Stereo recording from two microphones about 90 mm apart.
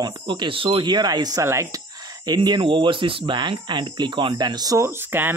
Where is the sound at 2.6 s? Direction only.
65° right (ahead or behind); by 4.7 s 50° right (ahead or behind).